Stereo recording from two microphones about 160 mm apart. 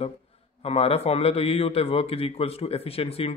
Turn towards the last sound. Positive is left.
turn(degrees=35)  # may be behind; listen again after turning